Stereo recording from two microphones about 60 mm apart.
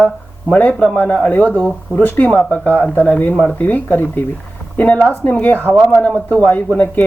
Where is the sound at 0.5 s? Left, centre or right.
Left.